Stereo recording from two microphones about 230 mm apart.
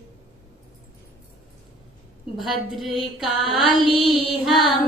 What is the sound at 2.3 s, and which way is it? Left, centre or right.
A woman's voice, centre.